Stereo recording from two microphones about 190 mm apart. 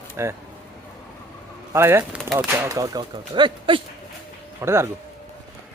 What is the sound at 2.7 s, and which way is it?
Speech, 20° right (ahead or behind).